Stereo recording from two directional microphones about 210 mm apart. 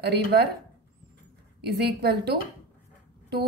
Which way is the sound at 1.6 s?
50° right (ahead or behind).